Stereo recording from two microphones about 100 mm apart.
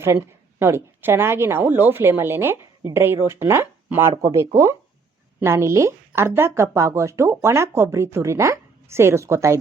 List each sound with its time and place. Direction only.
0.0 s speech: 25° right (ahead or behind)